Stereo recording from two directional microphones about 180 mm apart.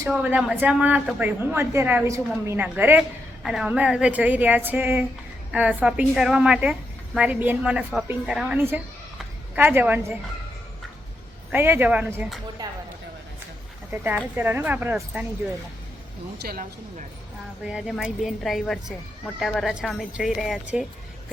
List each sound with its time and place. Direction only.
0.0 s a woman's voice: 10° right (ahead or behind)
11.5 s speech: 10° right (ahead or behind)
12.6 s speech: 20° right (ahead or behind)
13.9 s speech: 10° right (ahead or behind)
16.4 s speech: 60° right (ahead or behind)
17.7 s a woman's voice: centre (ahead or behind)